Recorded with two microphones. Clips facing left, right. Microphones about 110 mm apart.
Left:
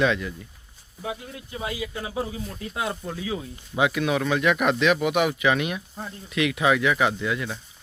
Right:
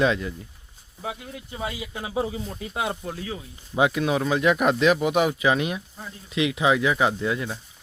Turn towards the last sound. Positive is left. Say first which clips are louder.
# right 1 dB
turn(degrees=-30)  # may be behind; listen again after turning